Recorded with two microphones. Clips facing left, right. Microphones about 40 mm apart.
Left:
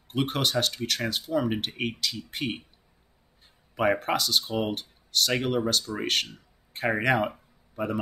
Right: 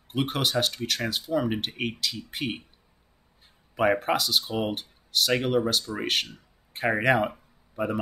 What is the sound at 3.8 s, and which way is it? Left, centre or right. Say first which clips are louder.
Speech: right 1 dB; centre.